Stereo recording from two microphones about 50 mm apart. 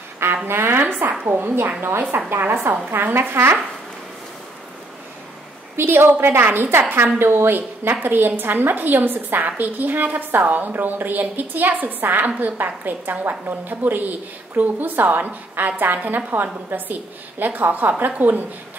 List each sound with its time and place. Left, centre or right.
0.5 s a woman's voice: right
5.8 s a woman's voice: right